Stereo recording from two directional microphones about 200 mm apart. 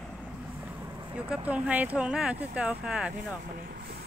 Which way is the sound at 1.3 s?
5° right (ahead or behind).